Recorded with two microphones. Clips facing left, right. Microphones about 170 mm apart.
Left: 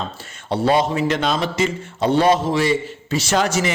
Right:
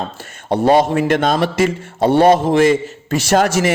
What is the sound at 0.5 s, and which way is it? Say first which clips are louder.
A man's voice: right 5 dB; 50° right (ahead or behind).